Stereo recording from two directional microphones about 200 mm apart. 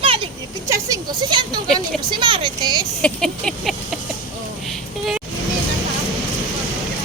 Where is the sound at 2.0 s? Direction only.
25° right (ahead or behind).